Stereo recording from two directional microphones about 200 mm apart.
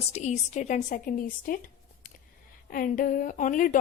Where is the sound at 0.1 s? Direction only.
35° left (ahead or behind).